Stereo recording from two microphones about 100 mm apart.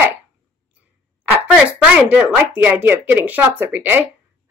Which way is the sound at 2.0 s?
15° right (ahead or behind).